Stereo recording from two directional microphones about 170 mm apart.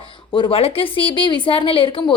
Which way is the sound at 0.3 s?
30° left (ahead or behind).